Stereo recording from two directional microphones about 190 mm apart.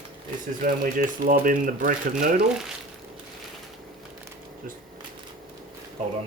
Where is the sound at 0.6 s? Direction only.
45° right (ahead or behind).